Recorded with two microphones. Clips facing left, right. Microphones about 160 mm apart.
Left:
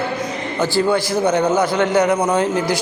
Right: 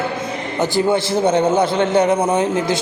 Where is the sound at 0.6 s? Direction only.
20° right (ahead or behind).